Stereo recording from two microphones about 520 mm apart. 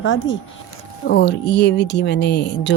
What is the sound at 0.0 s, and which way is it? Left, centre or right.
Speech, left.